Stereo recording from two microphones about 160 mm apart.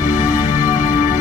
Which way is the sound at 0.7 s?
60° left (ahead or behind).